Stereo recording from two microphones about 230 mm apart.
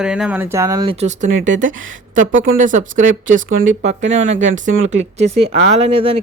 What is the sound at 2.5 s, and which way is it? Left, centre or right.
Speech, right.